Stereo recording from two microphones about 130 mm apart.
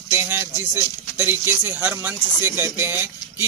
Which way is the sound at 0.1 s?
20° right (ahead or behind).